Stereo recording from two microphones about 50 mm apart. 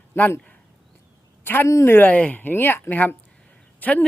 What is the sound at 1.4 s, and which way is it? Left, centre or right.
Speech, left.